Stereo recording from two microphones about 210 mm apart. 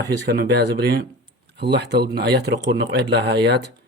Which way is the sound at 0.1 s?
50° right (ahead or behind).